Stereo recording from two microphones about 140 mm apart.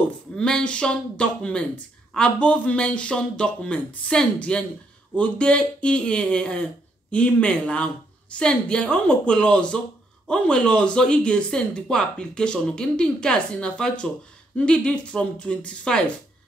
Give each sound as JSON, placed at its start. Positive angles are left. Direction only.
{"t": 0.4, "sound": "speech", "side_deg": 5}